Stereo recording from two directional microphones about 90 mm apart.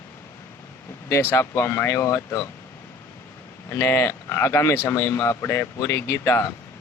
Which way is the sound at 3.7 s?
30° left (ahead or behind).